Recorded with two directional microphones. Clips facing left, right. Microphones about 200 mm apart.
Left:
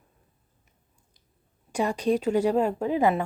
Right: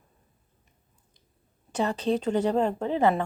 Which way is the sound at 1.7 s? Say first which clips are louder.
Left 1 dB; 10° left (ahead or behind).